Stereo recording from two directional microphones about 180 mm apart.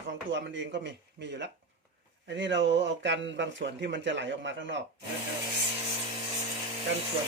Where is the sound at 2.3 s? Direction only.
90° right.